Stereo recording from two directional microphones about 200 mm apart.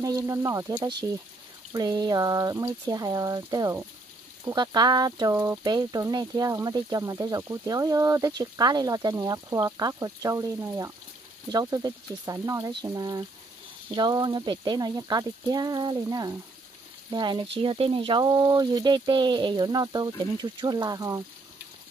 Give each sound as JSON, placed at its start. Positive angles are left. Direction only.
{"t": 0.0, "sound": "speech", "side_deg": -15}